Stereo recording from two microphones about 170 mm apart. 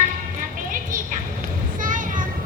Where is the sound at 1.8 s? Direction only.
50° right (ahead or behind).